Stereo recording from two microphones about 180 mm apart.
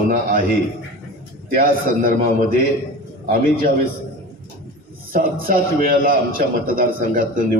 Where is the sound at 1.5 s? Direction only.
55° right (ahead or behind).